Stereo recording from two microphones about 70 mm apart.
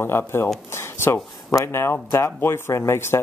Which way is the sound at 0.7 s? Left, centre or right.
Left.